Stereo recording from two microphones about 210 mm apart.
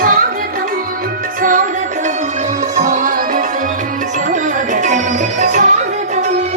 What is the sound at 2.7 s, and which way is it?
Music, 35° right (ahead or behind).